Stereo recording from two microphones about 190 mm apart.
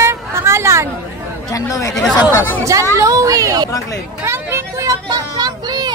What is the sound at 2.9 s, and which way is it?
Speech, 15° right (ahead or behind).